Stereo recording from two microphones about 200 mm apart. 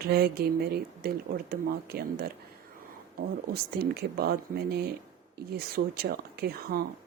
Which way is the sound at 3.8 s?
50° right (ahead or behind).